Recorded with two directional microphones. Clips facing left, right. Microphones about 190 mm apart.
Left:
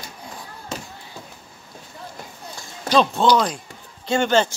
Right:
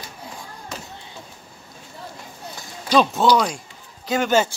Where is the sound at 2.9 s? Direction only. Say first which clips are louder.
Even; 5° right (ahead or behind).